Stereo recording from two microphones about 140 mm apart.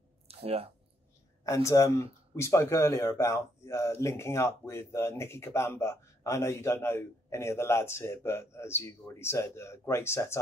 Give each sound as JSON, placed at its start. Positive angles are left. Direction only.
{"t": 0.3, "sound": "speech", "side_deg": -45}
{"t": 1.4, "sound": "speech", "side_deg": 20}